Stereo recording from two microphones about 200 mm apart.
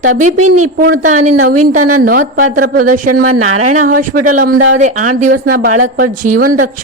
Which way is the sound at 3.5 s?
40° right (ahead or behind).